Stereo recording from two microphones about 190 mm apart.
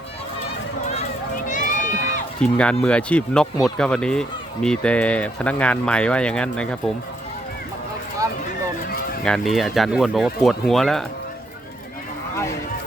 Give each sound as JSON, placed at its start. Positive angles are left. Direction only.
{"t": 1.5, "sound": "run", "side_deg": 40}
{"t": 2.4, "sound": "speech", "side_deg": 5}
{"t": 9.2, "sound": "speech", "side_deg": 0}